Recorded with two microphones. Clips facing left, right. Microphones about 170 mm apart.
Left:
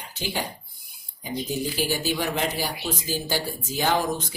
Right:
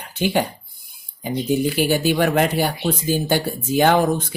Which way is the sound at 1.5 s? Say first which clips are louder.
Right 9 dB; 60° right (ahead or behind).